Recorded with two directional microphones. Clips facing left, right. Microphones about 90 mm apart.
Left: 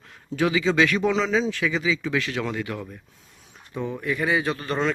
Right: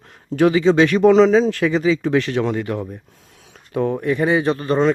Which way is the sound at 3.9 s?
35° right (ahead or behind).